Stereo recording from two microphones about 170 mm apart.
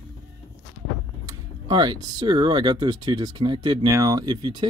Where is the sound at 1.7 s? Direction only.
25° right (ahead or behind).